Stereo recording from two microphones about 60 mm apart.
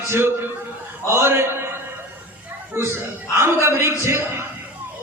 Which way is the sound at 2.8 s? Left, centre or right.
Right.